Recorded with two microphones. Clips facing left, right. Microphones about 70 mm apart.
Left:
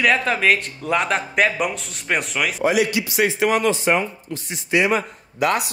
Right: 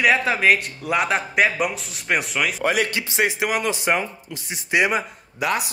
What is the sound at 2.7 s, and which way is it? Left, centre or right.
Speech, right.